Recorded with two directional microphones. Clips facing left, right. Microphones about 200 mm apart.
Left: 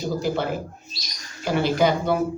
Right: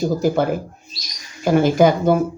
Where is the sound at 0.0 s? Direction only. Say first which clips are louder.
Right 7 dB; 45° right (ahead or behind).